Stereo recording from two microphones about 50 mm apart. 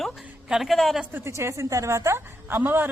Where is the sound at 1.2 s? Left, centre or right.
Right.